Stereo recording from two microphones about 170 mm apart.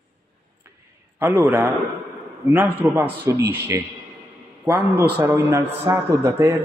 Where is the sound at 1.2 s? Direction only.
10° right (ahead or behind).